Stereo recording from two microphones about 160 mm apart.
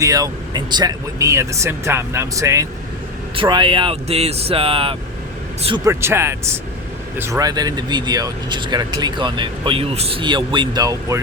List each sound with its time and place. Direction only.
0.0 s speech: 20° right (ahead or behind)
3.3 s speech: 30° right (ahead or behind)
5.8 s speech: 15° right (ahead or behind)